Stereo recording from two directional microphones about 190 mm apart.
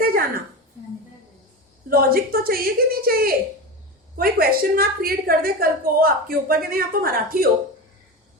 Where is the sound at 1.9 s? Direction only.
50° right (ahead or behind).